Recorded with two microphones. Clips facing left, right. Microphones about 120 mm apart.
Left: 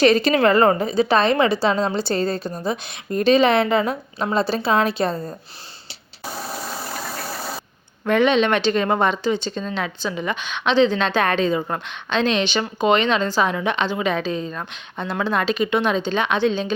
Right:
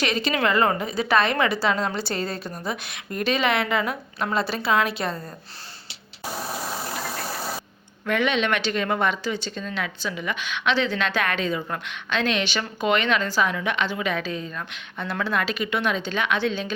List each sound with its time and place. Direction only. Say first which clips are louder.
0.0 s a woman's voice: left 8 dB; 40° left (ahead or behind)
8.0 s speech: left 6 dB; 30° left (ahead or behind)